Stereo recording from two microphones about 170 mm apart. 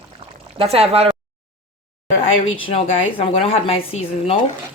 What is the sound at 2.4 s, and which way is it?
A woman's voice, 35° left (ahead or behind).